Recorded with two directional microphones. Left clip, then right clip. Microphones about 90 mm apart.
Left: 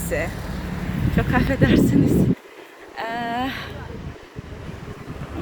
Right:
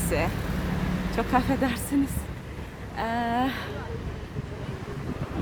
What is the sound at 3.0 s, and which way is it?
Speech, 10° right (ahead or behind).